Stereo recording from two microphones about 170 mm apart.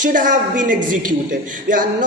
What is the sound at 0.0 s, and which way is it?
Speech, 50° right (ahead or behind).